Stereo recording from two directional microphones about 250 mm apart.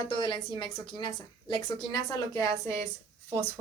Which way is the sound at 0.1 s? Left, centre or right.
Centre.